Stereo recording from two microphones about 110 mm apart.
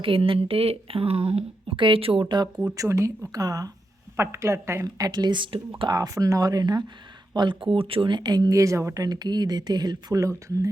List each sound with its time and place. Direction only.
0.0 s speech: 55° right (ahead or behind)
2.7 s a woman's voice: 30° right (ahead or behind); by 5.6 s 50° right (ahead or behind)
5.9 s speech: 30° right (ahead or behind)
7.6 s speech: 55° right (ahead or behind); by 10.7 s 30° right (ahead or behind)